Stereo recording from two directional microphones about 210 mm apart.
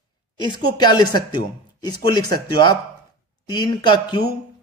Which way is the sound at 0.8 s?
20° left (ahead or behind).